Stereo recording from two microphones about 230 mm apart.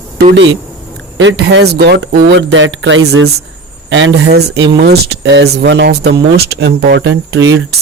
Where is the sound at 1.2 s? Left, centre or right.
Right.